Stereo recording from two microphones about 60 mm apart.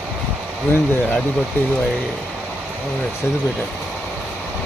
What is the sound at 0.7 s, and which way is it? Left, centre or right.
Speech, left.